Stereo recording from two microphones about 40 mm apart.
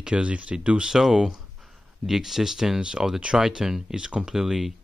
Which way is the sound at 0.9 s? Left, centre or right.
Centre.